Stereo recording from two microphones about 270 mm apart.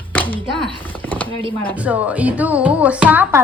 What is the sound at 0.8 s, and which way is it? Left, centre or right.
Chopping, centre.